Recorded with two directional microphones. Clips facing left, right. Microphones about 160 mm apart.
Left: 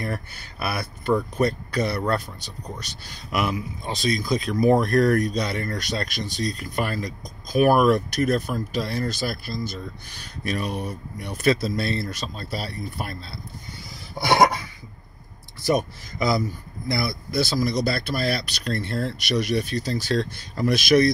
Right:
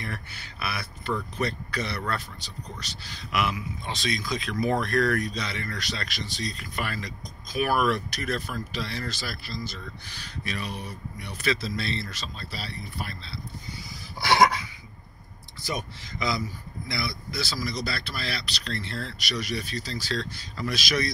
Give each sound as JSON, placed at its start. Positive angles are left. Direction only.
{"t": 0.0, "sound": "speech", "side_deg": 45}
{"t": 3.3, "sound": "speech", "side_deg": 45}
{"t": 14.1, "sound": "a sound", "side_deg": 50}
{"t": 15.6, "sound": "speech", "side_deg": 50}